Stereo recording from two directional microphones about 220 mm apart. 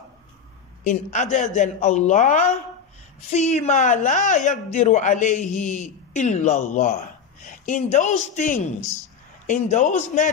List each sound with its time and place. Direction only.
0.8 s a woman's voice: 35° left (ahead or behind)